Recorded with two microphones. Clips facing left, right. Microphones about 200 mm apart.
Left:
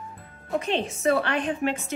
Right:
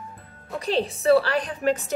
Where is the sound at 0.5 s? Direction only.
35° right (ahead or behind).